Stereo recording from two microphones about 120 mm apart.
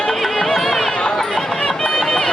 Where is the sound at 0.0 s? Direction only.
5° left (ahead or behind).